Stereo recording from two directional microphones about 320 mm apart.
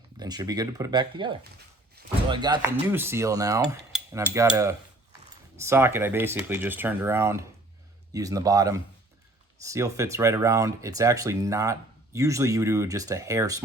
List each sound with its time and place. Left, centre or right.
0.2 s speech: centre
2.0 s a sound: right
2.3 s speech: centre